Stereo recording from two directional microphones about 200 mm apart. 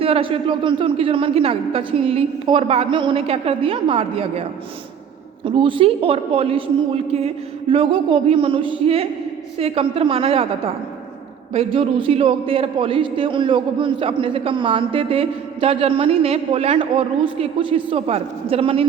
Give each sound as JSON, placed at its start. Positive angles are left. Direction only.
{"t": 0.0, "sound": "a man's voice", "side_deg": -25}
{"t": 5.5, "sound": "a man's voice", "side_deg": -25}
{"t": 11.5, "sound": "a man's voice", "side_deg": -25}